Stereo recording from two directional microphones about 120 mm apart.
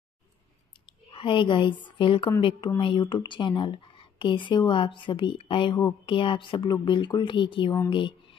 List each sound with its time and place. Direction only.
0.8 s speech: 45° left (ahead or behind)